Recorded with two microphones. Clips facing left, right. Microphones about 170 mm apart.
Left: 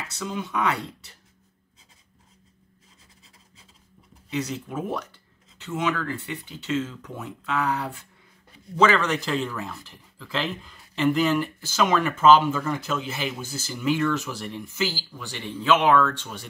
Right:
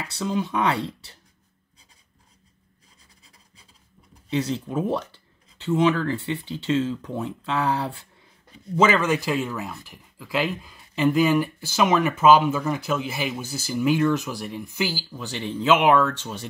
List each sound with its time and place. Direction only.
0.1 s speech: 30° right (ahead or behind)
4.3 s speech: 30° right (ahead or behind)
8.7 s speech: 20° right (ahead or behind)